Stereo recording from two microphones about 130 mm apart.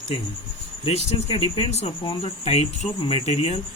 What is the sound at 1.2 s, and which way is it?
Speech, 50° left (ahead or behind).